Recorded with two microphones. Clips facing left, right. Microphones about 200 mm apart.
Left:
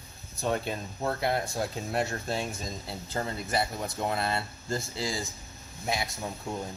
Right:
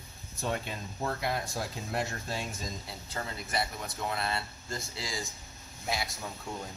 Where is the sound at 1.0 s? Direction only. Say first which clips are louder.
Left 4 dB; 30° left (ahead or behind).